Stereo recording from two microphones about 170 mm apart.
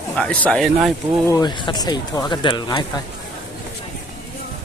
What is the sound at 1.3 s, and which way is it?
Speech, 25° left (ahead or behind).